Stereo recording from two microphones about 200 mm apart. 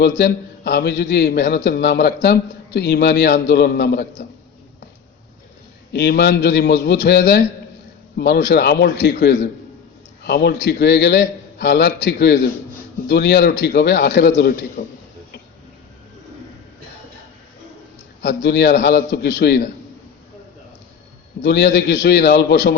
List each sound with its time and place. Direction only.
0.0 s a man's voice: 55° left (ahead or behind)
5.9 s a man's voice: 55° left (ahead or behind)
18.2 s a man's voice: 55° left (ahead or behind)
21.4 s a man's voice: 55° left (ahead or behind)